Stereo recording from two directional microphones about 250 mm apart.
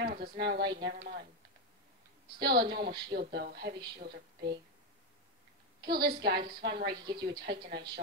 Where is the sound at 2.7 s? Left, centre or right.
Right.